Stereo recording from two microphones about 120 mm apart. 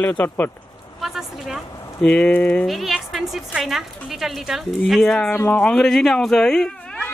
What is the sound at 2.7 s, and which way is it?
A woman's voice, centre (ahead or behind).